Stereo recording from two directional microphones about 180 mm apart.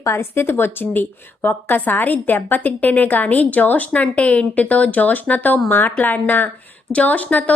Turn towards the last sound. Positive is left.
turn(degrees=10)  # may be behind; listen again after turning